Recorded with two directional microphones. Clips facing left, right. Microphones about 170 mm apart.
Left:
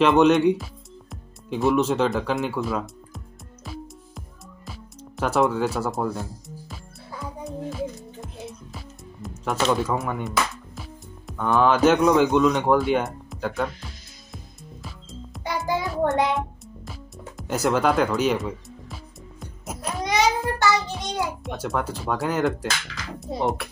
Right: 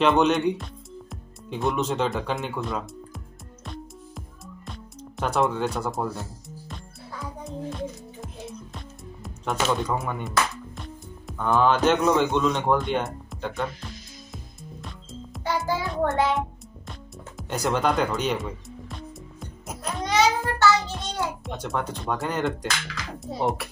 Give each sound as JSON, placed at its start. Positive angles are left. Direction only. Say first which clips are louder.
{"t": 0.0, "sound": "speech", "louder": "left 4 dB", "side_deg": 0}
{"t": 3.6, "sound": "music", "louder": "left 1 dB", "side_deg": 5}
{"t": 7.4, "sound": "music", "louder": "left 3 dB", "side_deg": 0}
{"t": 15.4, "sound": "music", "louder": "even", "side_deg": 15}
{"t": 17.4, "sound": "music", "louder": "left 3 dB", "side_deg": 0}
{"t": 20.9, "sound": "a child's voice", "louder": "left 2 dB", "side_deg": 10}